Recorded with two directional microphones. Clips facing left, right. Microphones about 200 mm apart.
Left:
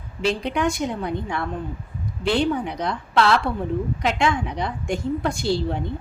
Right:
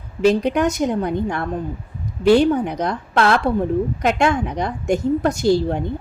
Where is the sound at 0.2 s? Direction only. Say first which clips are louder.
Right 7 dB; 45° right (ahead or behind).